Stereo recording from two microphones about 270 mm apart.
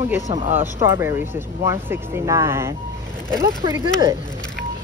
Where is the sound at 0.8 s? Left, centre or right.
Centre.